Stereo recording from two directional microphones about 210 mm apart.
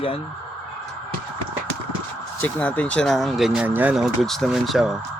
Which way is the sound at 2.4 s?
10° left (ahead or behind).